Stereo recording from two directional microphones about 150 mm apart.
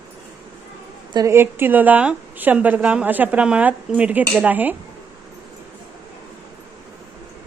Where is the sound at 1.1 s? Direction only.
20° right (ahead or behind).